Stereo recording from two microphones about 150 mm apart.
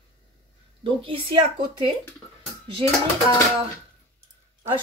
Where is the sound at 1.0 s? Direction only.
35° right (ahead or behind).